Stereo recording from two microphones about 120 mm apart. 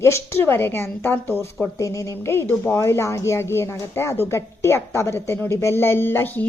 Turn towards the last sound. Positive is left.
turn(degrees=15)  # may be behind; listen again after turning